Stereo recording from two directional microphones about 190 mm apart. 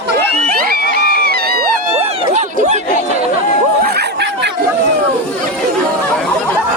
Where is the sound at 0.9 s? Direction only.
55° right (ahead or behind).